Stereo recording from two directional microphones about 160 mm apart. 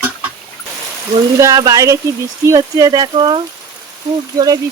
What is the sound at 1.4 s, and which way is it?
Speech, 20° right (ahead or behind).